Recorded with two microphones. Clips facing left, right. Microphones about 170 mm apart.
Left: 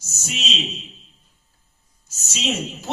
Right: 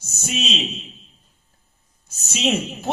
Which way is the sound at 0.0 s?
60° right (ahead or behind).